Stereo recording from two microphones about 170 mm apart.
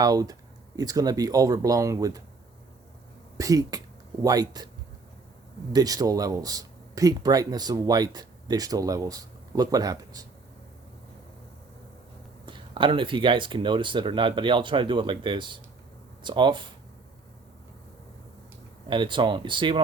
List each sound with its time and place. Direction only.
0.0 s speech: 20° right (ahead or behind)
3.3 s speech: 20° right (ahead or behind)
5.7 s speech: 20° right (ahead or behind)
12.5 s speech: 30° right (ahead or behind)
18.9 s speech: 30° right (ahead or behind)